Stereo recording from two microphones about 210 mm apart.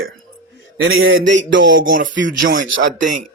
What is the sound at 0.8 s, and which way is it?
Speech, 70° right (ahead or behind).